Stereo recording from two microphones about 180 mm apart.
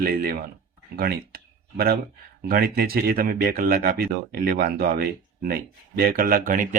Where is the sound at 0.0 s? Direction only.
55° right (ahead or behind).